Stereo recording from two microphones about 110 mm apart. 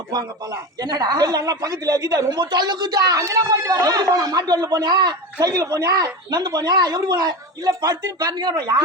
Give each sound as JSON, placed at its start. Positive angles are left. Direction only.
{"t": 0.1, "sound": "speech", "side_deg": -40}